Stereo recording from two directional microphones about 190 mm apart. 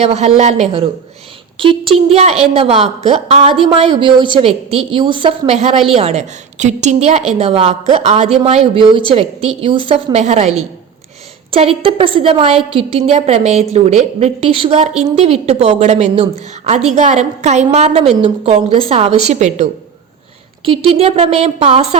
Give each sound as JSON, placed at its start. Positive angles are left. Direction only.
{"t": 0.0, "sound": "a woman's voice", "side_deg": -35}